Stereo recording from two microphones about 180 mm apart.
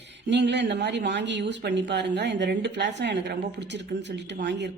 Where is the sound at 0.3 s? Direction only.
75° right (ahead or behind).